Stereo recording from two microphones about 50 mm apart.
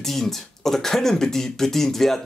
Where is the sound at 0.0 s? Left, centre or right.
Centre.